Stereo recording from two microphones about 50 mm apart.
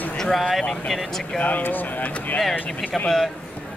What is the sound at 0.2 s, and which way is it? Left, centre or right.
Speech, centre.